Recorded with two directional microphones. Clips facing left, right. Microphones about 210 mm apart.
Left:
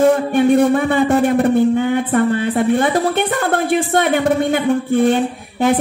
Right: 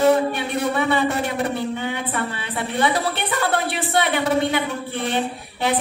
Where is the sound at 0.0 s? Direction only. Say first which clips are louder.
Left 5 dB; 50° left (ahead or behind).